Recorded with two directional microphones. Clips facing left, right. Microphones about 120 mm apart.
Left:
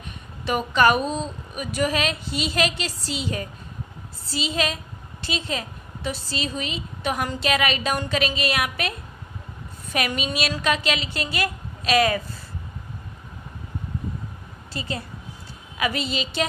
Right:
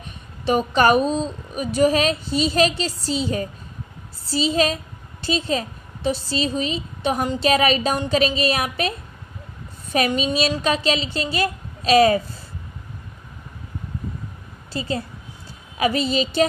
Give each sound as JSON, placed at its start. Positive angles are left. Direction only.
{"t": 0.5, "sound": "speech", "side_deg": -35}
{"t": 9.9, "sound": "speech", "side_deg": -35}
{"t": 14.7, "sound": "a woman's voice", "side_deg": -35}